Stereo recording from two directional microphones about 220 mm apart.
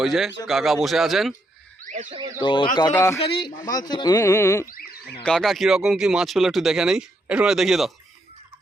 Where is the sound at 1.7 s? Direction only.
35° right (ahead or behind).